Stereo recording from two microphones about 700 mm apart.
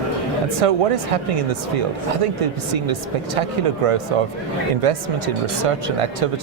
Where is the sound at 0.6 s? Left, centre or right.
Right.